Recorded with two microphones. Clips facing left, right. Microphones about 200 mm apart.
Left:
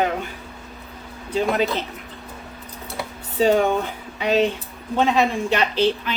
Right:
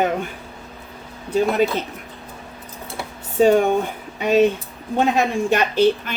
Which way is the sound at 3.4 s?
50° right (ahead or behind).